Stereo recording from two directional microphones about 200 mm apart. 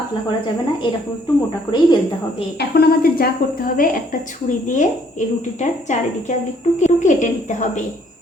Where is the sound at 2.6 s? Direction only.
50° left (ahead or behind).